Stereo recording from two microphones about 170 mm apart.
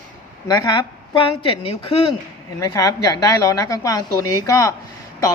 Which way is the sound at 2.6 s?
20° left (ahead or behind).